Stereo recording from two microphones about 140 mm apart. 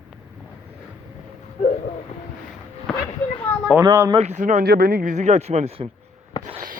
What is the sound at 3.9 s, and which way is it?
Speech, 30° right (ahead or behind).